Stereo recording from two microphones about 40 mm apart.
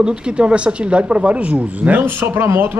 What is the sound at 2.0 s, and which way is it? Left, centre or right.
Speech, right.